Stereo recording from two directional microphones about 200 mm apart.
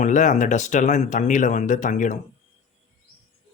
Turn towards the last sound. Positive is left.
turn(degrees=40)  # may be behind; listen again after turning